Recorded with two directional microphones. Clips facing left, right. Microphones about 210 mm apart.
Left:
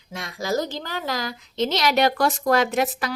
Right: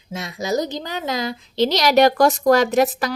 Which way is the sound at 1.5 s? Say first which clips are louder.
Right 5 dB; 35° right (ahead or behind).